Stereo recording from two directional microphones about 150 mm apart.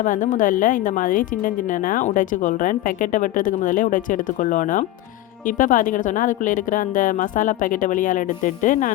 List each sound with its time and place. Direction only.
0.0 s speech: 60° left (ahead or behind)